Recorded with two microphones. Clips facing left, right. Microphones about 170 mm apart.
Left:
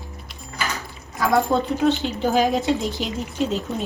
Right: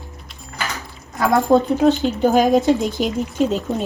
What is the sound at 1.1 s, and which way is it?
A woman's voice, 40° right (ahead or behind).